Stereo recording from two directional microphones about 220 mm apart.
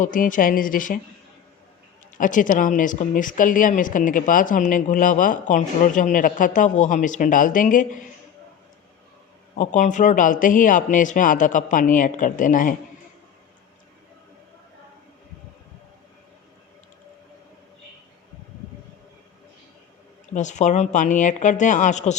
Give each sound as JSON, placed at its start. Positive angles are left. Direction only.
{"t": 0.0, "sound": "speech", "side_deg": 35}
{"t": 2.1, "sound": "speech", "side_deg": 35}
{"t": 9.6, "sound": "speech", "side_deg": 35}
{"t": 20.3, "sound": "speech", "side_deg": 35}